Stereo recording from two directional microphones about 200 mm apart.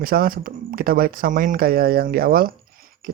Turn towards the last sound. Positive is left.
turn(degrees=-45)  # may be behind; listen again after turning